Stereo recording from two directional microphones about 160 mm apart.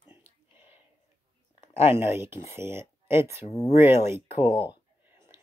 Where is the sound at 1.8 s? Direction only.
35° left (ahead or behind).